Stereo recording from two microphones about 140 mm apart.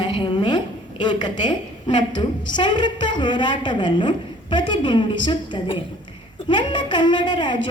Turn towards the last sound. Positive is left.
turn(degrees=35)  # may be behind; listen again after turning